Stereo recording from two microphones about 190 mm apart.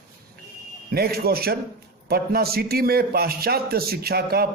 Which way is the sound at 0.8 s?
55° right (ahead or behind).